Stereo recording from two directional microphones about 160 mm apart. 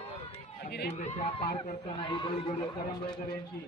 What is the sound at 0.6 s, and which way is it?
Chatter, 90° left.